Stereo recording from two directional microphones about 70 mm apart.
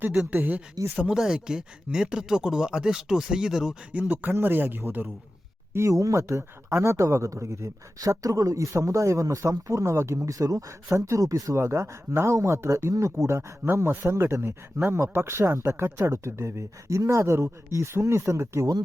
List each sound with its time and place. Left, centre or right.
0.3 s speech: right
1.1 s speech: centre
3.9 s speech: right
5.7 s speech: right